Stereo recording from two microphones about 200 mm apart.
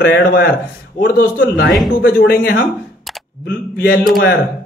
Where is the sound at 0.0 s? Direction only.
55° left (ahead or behind).